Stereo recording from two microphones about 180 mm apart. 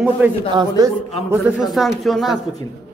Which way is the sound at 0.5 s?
20° right (ahead or behind).